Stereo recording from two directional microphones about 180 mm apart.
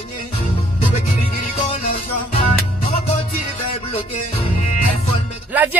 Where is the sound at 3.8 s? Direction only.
35° left (ahead or behind).